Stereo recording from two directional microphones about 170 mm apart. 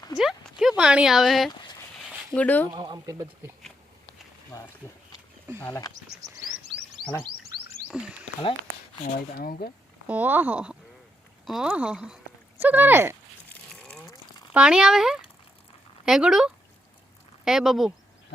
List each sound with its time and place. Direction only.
0.2 s a sound: centre (ahead or behind)
0.8 s speech: 5° right (ahead or behind)
2.6 s speech: 25° right (ahead or behind)
4.8 s speech: 15° left (ahead or behind)
7.9 s speech: 5° right (ahead or behind)
9.1 s speech: 60° left (ahead or behind)
10.1 s speech: 10° right (ahead or behind)
13.5 s a sound: 5° left (ahead or behind)
14.5 s speech: 5° right (ahead or behind)